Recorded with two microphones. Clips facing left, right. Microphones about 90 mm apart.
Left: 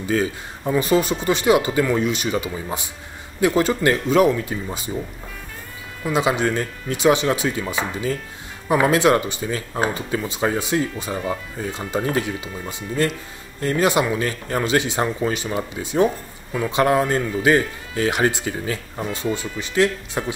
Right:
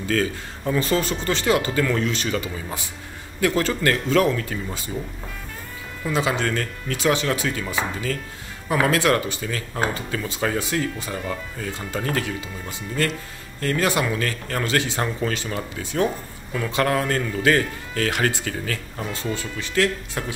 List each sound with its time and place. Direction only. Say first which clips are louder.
0.0 s speech: left 2 dB; 15° left (ahead or behind)
6.0 s speech: left 3 dB; 15° left (ahead or behind)